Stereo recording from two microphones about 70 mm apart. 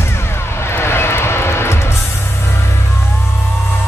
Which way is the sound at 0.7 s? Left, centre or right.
Left.